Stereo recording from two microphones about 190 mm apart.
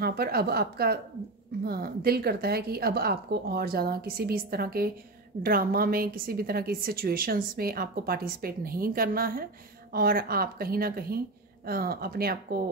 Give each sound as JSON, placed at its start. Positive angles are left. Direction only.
{"t": 0.0, "sound": "a woman's voice", "side_deg": -55}